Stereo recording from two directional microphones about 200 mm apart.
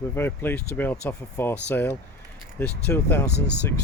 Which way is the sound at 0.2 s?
10° left (ahead or behind).